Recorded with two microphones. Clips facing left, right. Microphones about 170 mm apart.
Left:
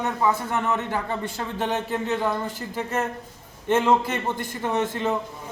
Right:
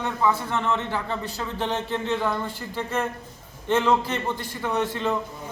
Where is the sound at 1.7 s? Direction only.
10° left (ahead or behind).